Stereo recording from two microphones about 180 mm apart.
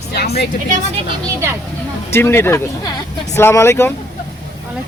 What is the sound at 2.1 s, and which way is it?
Speech, 15° left (ahead or behind).